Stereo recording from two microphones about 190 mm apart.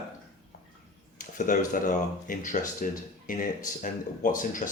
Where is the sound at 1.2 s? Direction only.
45° left (ahead or behind).